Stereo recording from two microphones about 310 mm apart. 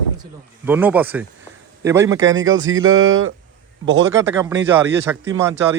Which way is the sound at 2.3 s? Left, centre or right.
Right.